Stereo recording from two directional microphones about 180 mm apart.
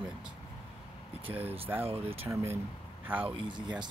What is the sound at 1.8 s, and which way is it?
Speech, 35° right (ahead or behind).